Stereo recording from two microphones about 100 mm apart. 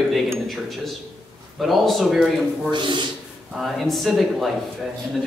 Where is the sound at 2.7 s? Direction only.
55° right (ahead or behind).